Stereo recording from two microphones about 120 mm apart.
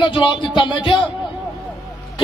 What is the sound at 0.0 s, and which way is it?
Speech, 40° left (ahead or behind).